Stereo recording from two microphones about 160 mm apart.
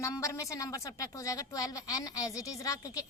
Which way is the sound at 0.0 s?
20° left (ahead or behind).